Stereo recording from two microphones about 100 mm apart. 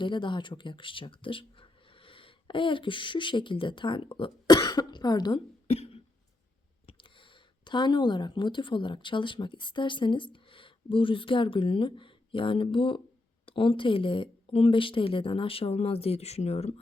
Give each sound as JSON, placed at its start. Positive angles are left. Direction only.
{"t": 0.0, "sound": "speech", "side_deg": 50}
{"t": 4.5, "sound": "speech", "side_deg": 45}
{"t": 5.6, "sound": "cough", "side_deg": 75}
{"t": 6.8, "sound": "speech", "side_deg": 55}